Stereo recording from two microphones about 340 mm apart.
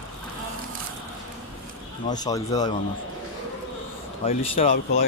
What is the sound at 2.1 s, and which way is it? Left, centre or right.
Speech, centre.